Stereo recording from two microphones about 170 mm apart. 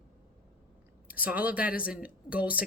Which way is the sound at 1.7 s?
60° left (ahead or behind).